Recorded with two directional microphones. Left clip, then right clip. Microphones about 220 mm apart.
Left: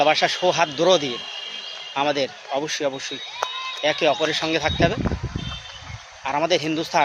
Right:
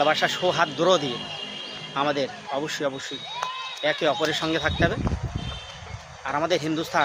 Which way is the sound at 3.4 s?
25° left (ahead or behind).